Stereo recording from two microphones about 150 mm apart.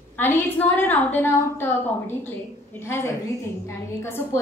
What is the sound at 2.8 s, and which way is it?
A woman's voice, 15° left (ahead or behind).